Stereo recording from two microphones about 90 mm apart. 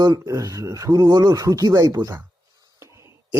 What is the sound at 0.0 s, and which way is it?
Speech, 40° right (ahead or behind).